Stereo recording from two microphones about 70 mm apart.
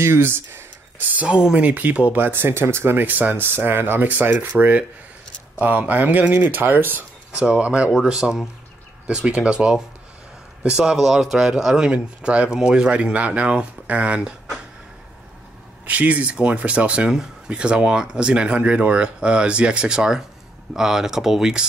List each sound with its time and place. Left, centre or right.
0.0 s speech: right
1.0 s speech: centre
7.4 s speech: centre
7.9 s speech: centre
15.8 s speech: right